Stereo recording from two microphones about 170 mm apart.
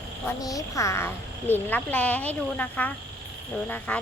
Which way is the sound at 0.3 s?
20° left (ahead or behind).